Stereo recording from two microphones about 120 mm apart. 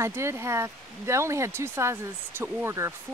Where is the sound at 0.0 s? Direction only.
20° right (ahead or behind).